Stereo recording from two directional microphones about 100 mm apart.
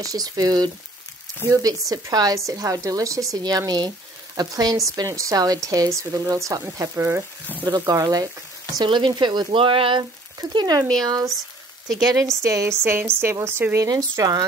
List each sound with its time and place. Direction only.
0.0 s a woman's voice: 35° right (ahead or behind)
7.6 s a woman's voice: 40° right (ahead or behind)
8.7 s speech: 50° right (ahead or behind)
10.5 s speech: 45° right (ahead or behind)
11.9 s a woman's voice: 35° right (ahead or behind)